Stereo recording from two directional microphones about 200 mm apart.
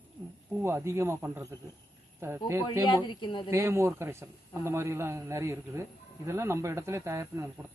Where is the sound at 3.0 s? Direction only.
25° left (ahead or behind).